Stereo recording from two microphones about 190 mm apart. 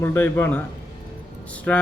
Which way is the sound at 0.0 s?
10° left (ahead or behind).